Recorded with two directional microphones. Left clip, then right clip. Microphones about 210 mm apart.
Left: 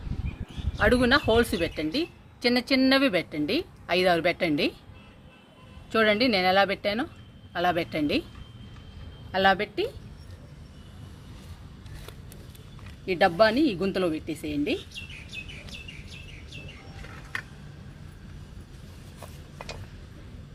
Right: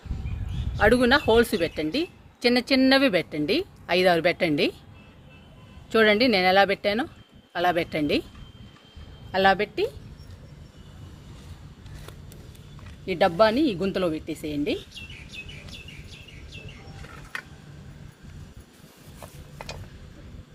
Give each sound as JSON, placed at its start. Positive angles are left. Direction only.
{"t": 0.8, "sound": "a woman's voice", "side_deg": -30}
{"t": 5.9, "sound": "a woman's voice", "side_deg": -35}
{"t": 9.3, "sound": "a woman's voice", "side_deg": -30}
{"t": 13.1, "sound": "speech", "side_deg": -20}